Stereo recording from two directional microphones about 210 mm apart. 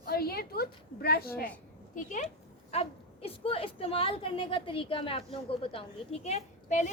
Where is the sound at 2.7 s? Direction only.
30° left (ahead or behind).